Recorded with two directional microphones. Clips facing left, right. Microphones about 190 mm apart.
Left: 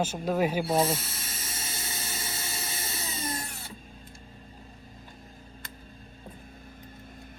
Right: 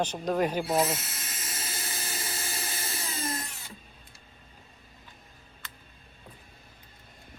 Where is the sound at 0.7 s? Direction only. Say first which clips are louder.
Left 1 dB; 30° left (ahead or behind).